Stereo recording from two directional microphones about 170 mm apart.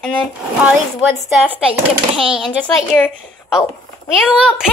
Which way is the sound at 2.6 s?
5° left (ahead or behind).